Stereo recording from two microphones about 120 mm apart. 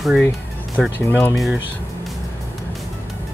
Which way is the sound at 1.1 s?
20° left (ahead or behind).